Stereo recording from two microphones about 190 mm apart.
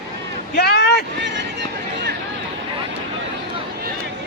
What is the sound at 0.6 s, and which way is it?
Vehicle, 60° left (ahead or behind).